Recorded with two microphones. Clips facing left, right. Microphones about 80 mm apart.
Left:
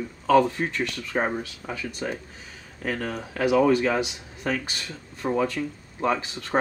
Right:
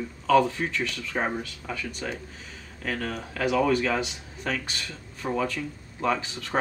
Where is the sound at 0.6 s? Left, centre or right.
Centre.